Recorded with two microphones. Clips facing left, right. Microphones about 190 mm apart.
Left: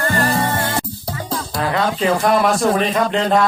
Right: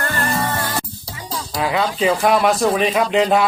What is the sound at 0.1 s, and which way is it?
Music, 35° left (ahead or behind).